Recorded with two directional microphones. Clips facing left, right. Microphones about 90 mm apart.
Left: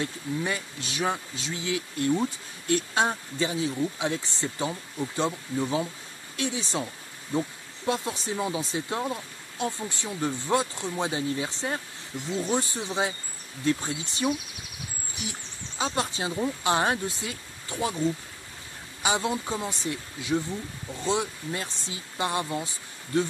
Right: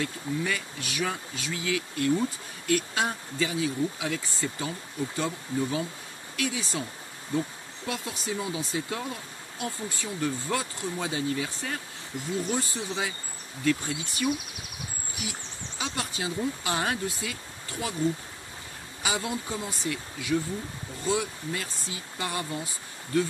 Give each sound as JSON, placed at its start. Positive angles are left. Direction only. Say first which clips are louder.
{"t": 0.0, "sound": "speech", "louder": "even", "side_deg": 25}
{"t": 15.8, "sound": "speech", "louder": "left 4 dB", "side_deg": 30}
{"t": 19.0, "sound": "speech", "louder": "left 4 dB", "side_deg": 25}